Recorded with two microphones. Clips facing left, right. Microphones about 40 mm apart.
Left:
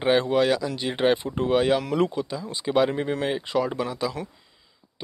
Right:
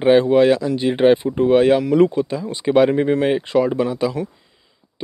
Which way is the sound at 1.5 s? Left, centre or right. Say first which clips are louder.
Right 7 dB; right.